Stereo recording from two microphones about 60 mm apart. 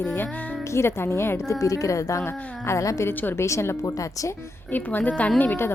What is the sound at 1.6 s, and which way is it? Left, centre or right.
A woman's voice, left.